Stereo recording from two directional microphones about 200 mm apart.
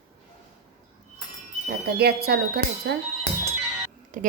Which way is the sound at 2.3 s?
50° right (ahead or behind).